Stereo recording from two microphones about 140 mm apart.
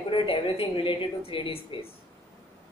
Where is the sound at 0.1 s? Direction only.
35° left (ahead or behind).